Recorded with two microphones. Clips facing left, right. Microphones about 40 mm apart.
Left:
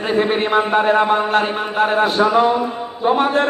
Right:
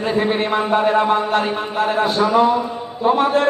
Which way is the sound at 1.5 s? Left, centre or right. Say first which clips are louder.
Left 2 dB; centre.